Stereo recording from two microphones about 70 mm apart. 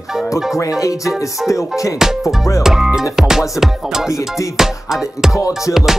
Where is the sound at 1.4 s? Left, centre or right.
Left.